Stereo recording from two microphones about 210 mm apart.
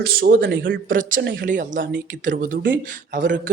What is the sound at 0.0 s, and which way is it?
Speech, 50° right (ahead or behind).